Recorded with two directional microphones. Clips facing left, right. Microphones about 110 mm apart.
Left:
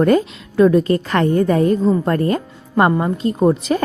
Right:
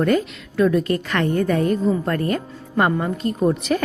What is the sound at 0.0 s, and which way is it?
A woman's voice, 30° left (ahead or behind).